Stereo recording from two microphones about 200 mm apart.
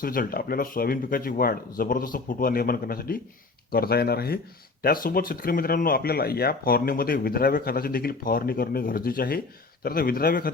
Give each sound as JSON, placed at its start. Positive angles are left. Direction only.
{"t": 0.0, "sound": "speech", "side_deg": 45}